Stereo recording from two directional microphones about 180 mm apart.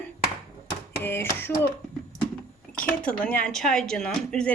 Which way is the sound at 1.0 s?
15° left (ahead or behind).